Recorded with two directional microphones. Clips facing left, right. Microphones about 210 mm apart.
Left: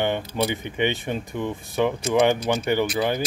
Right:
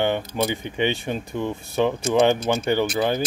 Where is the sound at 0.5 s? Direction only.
20° left (ahead or behind).